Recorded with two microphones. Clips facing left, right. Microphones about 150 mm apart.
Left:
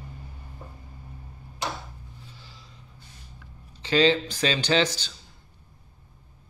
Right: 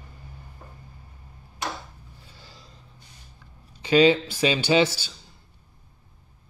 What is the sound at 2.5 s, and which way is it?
Snort, 40° right (ahead or behind).